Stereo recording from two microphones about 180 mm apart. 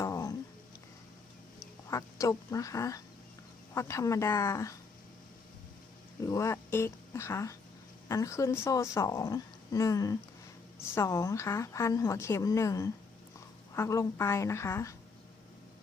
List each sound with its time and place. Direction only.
0.0 s music: 20° left (ahead or behind)
1.9 s a woman's voice: 20° left (ahead or behind)
6.2 s a woman's voice: 15° left (ahead or behind)